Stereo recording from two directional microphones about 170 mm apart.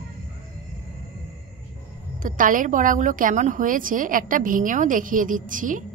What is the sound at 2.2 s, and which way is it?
A woman's voice, 50° right (ahead or behind).